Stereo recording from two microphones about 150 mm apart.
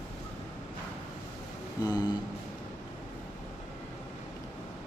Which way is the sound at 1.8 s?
25° left (ahead or behind).